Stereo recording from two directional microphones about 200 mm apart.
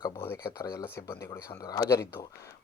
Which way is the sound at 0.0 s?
15° left (ahead or behind).